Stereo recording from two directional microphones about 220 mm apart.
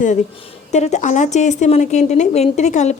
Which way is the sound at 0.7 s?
30° left (ahead or behind).